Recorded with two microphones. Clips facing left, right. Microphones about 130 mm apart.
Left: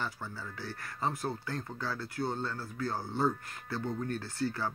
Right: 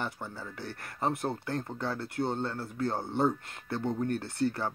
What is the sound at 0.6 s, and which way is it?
Speech, 55° right (ahead or behind).